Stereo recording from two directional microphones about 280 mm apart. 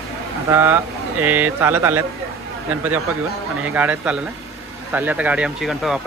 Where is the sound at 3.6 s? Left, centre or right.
Centre.